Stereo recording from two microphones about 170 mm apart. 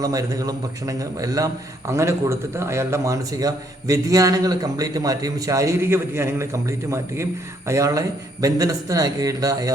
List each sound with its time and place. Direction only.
0.0 s a man's voice: 20° right (ahead or behind)